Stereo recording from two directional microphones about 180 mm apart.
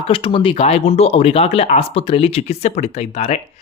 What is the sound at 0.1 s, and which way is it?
Speech, 30° left (ahead or behind).